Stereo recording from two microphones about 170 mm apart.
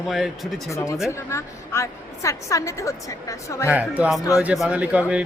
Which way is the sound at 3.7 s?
10° right (ahead or behind).